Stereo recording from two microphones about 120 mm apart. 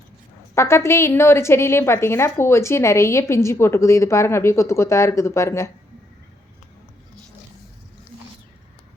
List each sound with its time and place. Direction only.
0.5 s a woman's voice: 20° left (ahead or behind)